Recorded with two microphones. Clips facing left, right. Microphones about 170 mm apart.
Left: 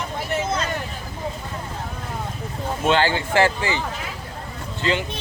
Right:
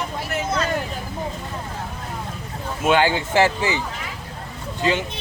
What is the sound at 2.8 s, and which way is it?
Speech, 15° right (ahead or behind).